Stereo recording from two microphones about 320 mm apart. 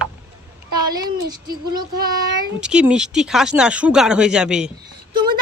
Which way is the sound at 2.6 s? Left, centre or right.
Centre.